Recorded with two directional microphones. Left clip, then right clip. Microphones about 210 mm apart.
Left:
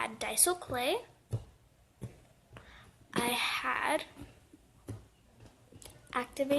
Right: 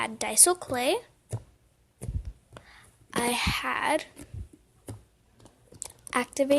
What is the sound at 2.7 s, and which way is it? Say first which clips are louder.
Speech: right 4 dB; 40° right (ahead or behind).